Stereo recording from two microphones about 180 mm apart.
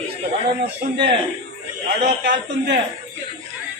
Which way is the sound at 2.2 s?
75° right (ahead or behind).